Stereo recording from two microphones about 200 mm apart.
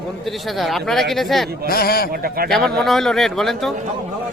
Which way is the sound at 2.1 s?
45° right (ahead or behind).